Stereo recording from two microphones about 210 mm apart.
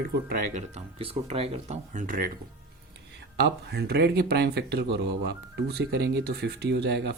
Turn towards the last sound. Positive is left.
turn(degrees=-50)  # may be behind; listen again after turning